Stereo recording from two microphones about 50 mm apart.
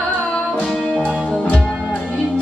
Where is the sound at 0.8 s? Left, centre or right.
Left.